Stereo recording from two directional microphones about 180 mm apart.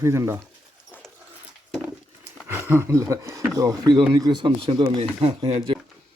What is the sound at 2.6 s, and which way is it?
Speech, 15° right (ahead or behind).